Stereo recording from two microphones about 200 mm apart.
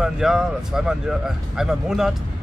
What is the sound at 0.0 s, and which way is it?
Speech, centre (ahead or behind).